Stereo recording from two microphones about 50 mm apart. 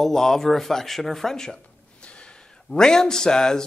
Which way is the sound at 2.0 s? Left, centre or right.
Left.